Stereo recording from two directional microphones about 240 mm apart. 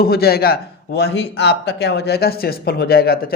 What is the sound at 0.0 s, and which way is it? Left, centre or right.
Speech, left.